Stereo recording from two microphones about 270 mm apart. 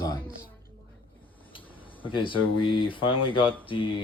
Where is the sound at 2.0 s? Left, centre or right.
Centre.